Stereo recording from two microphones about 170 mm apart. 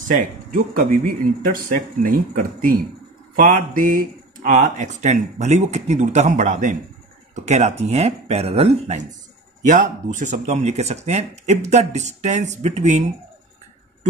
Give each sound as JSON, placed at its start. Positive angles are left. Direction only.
{"t": 0.1, "sound": "speech", "side_deg": -55}
{"t": 9.7, "sound": "speech", "side_deg": -50}